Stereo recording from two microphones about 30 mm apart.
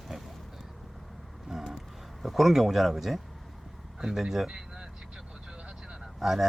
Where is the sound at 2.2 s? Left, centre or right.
Centre.